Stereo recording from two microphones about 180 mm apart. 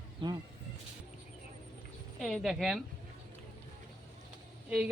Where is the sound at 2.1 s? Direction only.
Centre (ahead or behind).